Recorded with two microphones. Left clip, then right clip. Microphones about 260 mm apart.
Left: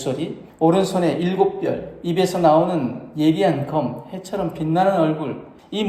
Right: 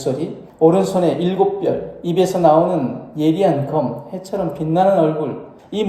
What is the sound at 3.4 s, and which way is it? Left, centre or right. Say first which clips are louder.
Speech: right 3 dB; left.